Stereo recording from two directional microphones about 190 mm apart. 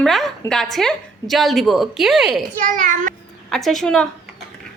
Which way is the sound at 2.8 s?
45° right (ahead or behind).